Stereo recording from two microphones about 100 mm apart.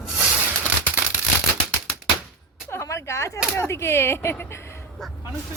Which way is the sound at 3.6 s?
25° left (ahead or behind).